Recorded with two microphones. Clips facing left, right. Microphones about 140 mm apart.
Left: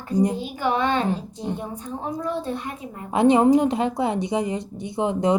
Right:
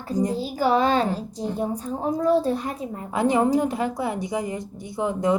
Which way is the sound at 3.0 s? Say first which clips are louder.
Left 5 dB; 20° left (ahead or behind).